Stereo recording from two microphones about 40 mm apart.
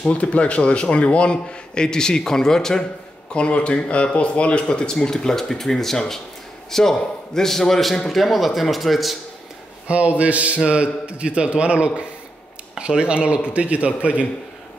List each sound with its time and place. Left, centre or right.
0.1 s speech: left; by 2.8 s centre
3.3 s a man's voice: left; by 9.1 s centre
9.8 s a man's voice: right